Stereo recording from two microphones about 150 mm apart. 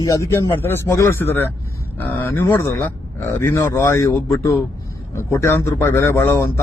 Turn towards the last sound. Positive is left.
turn(degrees=15)  # may be behind; listen again after turning